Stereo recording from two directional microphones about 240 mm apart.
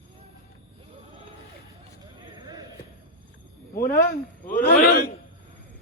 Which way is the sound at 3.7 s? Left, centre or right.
Left.